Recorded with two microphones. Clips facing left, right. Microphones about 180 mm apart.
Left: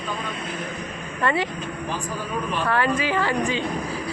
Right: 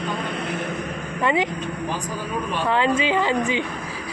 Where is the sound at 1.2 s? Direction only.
15° right (ahead or behind).